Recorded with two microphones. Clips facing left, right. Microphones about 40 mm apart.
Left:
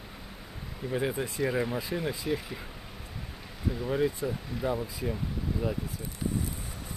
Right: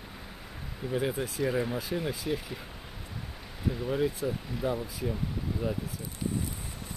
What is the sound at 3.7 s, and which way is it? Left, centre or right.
Speech, centre.